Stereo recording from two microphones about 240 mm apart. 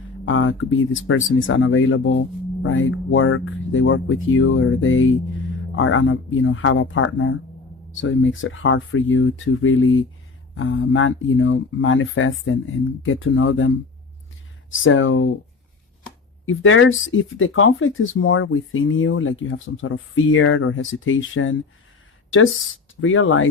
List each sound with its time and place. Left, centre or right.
0.3 s speech: left
16.5 s speech: left
23.0 s speech: left